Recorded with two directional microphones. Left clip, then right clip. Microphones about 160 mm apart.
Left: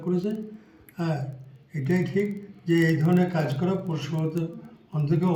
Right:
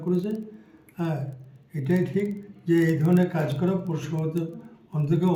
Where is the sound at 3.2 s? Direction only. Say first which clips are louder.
Even; 15° right (ahead or behind).